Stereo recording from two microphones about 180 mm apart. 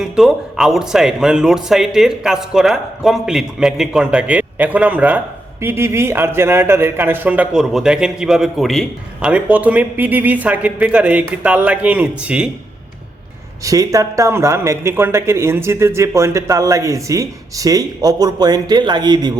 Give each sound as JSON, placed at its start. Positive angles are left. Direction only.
{"t": 0.0, "sound": "speech", "side_deg": 0}
{"t": 13.7, "sound": "speech", "side_deg": -20}